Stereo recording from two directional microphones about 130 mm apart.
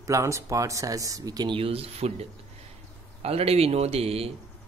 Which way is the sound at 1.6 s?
50° right (ahead or behind).